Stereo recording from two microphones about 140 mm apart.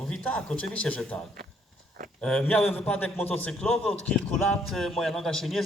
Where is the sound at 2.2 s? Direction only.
10° left (ahead or behind).